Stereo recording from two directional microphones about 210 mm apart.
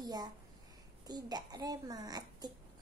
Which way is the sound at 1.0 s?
20° right (ahead or behind).